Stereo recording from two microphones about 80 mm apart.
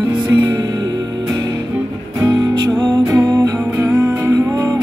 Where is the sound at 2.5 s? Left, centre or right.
Right.